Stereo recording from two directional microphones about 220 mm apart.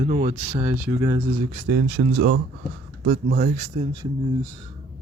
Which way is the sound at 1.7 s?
45° right (ahead or behind).